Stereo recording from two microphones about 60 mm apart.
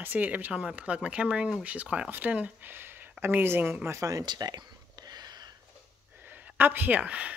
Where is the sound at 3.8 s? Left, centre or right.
Right.